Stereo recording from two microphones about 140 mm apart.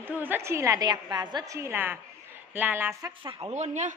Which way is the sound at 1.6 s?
15° right (ahead or behind).